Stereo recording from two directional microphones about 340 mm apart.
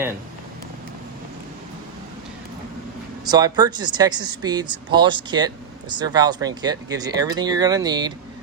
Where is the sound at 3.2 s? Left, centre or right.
Centre.